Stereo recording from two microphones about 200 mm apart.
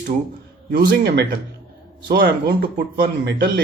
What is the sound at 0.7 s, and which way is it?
Speech, 55° right (ahead or behind).